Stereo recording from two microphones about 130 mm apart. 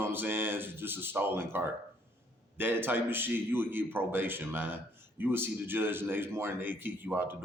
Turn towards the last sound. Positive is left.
turn(degrees=-15)  # may be behind; listen again after turning